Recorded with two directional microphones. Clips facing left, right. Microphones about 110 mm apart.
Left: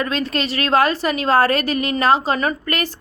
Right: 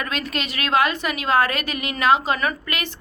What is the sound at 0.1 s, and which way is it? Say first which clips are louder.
A woman's voice: left 5 dB; 35° left (ahead or behind).